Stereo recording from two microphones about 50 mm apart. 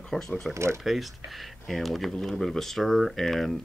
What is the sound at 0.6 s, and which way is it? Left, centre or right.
Speech, right.